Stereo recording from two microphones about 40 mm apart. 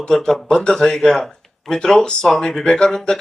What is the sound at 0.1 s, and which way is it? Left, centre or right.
A man's voice, centre.